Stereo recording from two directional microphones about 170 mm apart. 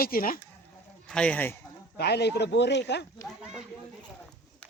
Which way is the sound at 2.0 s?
75° left (ahead or behind).